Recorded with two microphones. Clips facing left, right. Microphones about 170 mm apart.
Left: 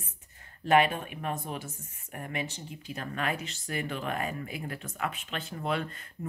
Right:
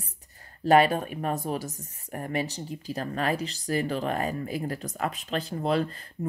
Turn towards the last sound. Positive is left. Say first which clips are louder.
# right 6 dB
turn(degrees=-35)  # may be behind; listen again after turning